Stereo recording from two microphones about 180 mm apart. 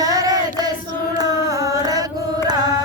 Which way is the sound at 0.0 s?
20° right (ahead or behind).